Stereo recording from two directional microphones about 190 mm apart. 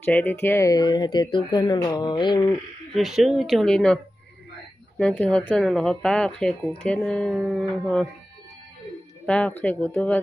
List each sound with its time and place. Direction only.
0.0 s speech: 10° left (ahead or behind)
2.9 s speech: centre (ahead or behind)
9.2 s speech: 5° left (ahead or behind)